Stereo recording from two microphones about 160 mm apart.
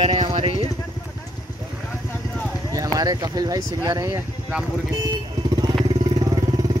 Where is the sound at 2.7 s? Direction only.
20° right (ahead or behind).